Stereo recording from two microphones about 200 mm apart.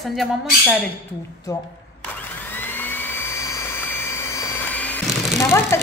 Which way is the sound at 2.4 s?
10° left (ahead or behind).